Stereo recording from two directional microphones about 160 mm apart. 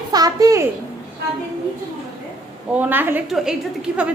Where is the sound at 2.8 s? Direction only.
10° right (ahead or behind).